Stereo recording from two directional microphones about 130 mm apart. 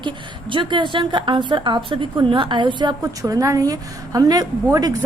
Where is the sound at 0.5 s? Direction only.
40° right (ahead or behind).